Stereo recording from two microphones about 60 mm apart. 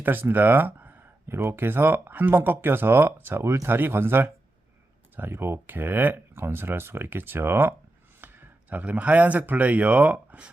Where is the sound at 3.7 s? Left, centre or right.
Right.